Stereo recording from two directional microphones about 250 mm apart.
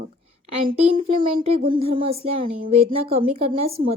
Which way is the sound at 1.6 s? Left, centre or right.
Right.